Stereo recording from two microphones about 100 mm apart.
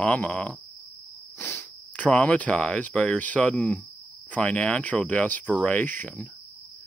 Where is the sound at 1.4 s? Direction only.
25° left (ahead or behind).